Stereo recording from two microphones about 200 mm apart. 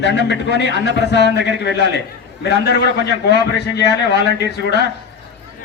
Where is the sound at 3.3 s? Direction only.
55° left (ahead or behind).